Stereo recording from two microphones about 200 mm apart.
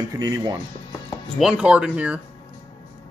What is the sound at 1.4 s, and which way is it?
Speech, 5° right (ahead or behind).